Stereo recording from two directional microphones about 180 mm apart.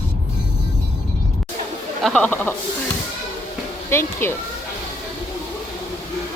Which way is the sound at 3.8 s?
15° left (ahead or behind).